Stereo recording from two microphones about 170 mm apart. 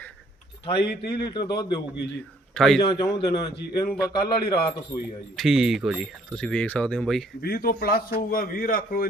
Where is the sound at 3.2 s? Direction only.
25° left (ahead or behind).